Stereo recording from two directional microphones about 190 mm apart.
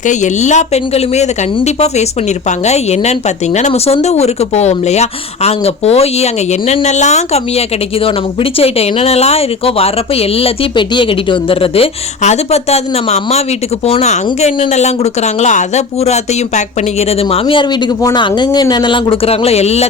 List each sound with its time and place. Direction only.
0.0 s a woman's voice: 40° left (ahead or behind)